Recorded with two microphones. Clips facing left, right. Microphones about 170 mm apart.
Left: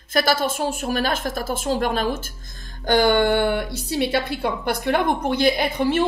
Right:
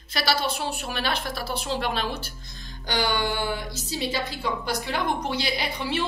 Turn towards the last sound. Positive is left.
turn(degrees=50)  # may be behind; listen again after turning